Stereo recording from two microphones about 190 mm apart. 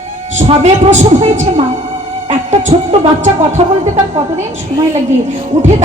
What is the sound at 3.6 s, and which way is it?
Speech, 30° right (ahead or behind).